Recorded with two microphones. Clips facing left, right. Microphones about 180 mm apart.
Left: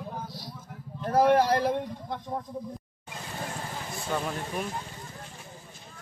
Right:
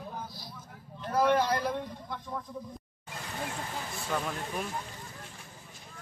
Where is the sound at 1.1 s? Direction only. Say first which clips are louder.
Left 4 dB; 40° left (ahead or behind).